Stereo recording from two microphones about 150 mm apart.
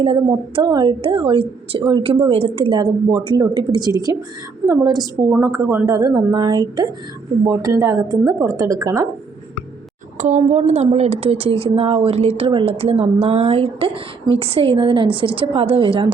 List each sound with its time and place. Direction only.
0.0 s a woman's voice: 35° right (ahead or behind)
10.2 s a woman's voice: 50° right (ahead or behind)